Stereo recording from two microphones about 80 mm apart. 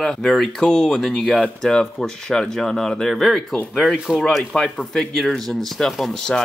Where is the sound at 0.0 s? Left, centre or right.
Centre.